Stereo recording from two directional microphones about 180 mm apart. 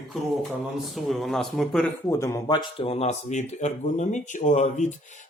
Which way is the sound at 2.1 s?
15° left (ahead or behind).